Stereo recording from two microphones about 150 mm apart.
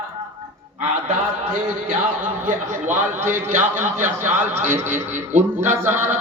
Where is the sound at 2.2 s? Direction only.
15° right (ahead or behind).